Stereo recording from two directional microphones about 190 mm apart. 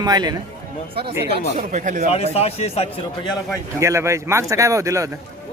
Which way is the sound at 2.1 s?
35° left (ahead or behind).